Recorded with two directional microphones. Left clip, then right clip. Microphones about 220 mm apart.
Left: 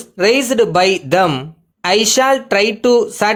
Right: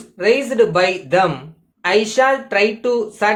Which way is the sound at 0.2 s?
50° left (ahead or behind).